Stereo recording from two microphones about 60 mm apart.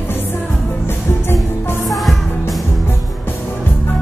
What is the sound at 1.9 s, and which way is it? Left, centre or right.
Music, centre.